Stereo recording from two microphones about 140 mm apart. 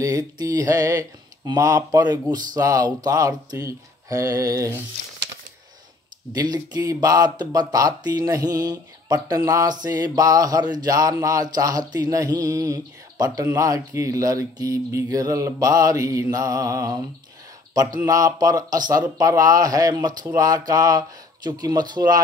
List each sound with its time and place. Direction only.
0.0 s speech: 25° right (ahead or behind)
6.3 s speech: 30° right (ahead or behind)